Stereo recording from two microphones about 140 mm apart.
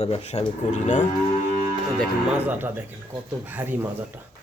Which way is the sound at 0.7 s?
60° left (ahead or behind).